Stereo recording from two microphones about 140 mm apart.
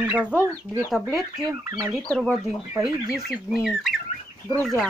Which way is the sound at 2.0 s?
10° left (ahead or behind).